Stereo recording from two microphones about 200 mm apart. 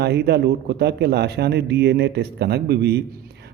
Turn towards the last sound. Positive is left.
turn(degrees=-55)  # may be behind; listen again after turning